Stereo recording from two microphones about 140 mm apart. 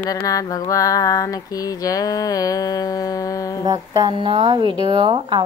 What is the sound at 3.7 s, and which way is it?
Speech, 30° right (ahead or behind).